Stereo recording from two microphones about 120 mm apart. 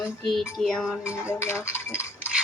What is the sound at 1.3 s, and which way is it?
Speech, 20° left (ahead or behind).